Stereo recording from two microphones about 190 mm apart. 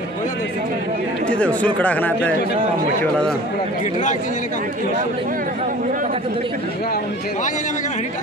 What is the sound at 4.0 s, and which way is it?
Speech, 40° left (ahead or behind).